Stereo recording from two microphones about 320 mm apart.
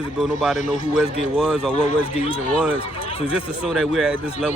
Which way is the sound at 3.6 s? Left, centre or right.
Centre.